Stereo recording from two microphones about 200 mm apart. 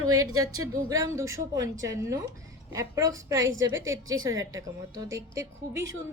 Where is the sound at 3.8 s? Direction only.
75° right (ahead or behind).